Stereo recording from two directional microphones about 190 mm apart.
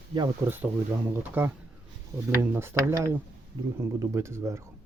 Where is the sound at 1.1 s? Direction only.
10° right (ahead or behind).